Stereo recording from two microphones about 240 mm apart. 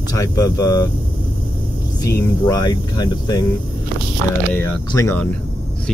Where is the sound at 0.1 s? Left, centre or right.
Centre.